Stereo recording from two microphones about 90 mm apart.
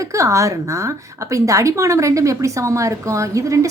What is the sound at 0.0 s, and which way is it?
A woman's voice, 35° right (ahead or behind).